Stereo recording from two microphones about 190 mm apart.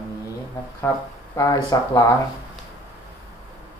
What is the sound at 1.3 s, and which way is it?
Speech, 20° left (ahead or behind).